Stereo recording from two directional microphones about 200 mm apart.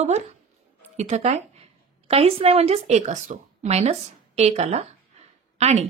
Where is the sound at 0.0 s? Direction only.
35° right (ahead or behind).